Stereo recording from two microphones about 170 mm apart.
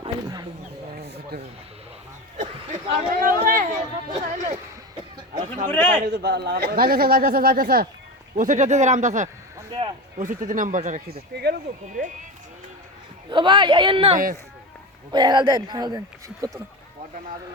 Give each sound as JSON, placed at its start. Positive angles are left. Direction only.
{"t": 0.0, "sound": "a sound", "side_deg": -25}
{"t": 0.9, "sound": "a sound", "side_deg": -70}
{"t": 2.4, "sound": "chuckle", "side_deg": -40}
{"t": 3.2, "sound": "chatter", "side_deg": -55}
{"t": 4.1, "sound": "a sound", "side_deg": -40}
{"t": 5.6, "sound": "a man's voice", "side_deg": 10}
{"t": 6.1, "sound": "a man's voice", "side_deg": -75}
{"t": 8.4, "sound": "speech", "side_deg": -45}
{"t": 13.3, "sound": "speech", "side_deg": -30}